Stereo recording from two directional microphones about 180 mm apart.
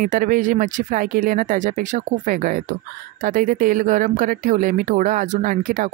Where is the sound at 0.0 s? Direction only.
45° right (ahead or behind).